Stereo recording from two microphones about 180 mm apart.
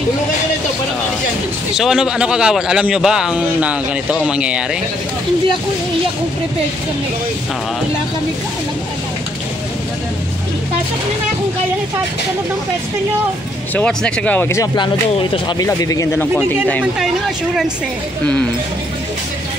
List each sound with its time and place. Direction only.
1.8 s a man's voice: 5° right (ahead or behind)
13.7 s speech: 5° left (ahead or behind)